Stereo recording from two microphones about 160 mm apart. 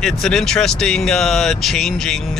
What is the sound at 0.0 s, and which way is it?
Speech, centre (ahead or behind).